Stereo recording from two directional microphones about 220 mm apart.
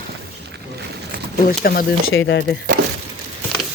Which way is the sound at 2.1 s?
55° left (ahead or behind).